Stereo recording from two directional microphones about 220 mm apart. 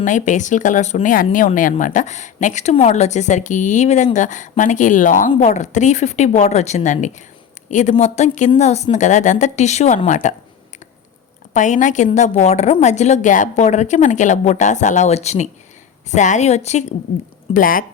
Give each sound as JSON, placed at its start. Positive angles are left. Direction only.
{"t": 0.0, "sound": "speech", "side_deg": 35}
{"t": 11.5, "sound": "speech", "side_deg": 35}